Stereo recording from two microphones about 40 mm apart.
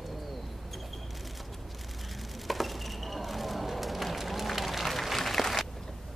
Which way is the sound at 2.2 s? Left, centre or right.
Centre.